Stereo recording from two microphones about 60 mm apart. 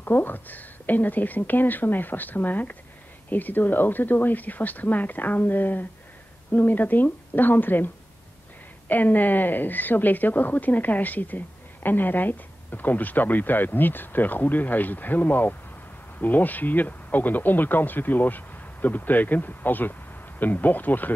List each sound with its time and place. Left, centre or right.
0.0 s a woman's voice: left